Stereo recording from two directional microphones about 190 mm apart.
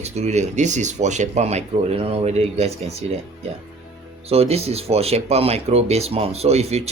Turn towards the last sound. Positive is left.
turn(degrees=-35)  # may be behind; listen again after turning